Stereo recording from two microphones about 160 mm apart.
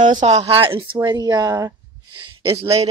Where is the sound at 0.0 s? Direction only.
50° right (ahead or behind).